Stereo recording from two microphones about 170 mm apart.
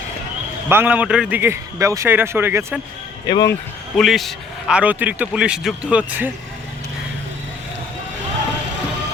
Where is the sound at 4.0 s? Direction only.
Centre (ahead or behind).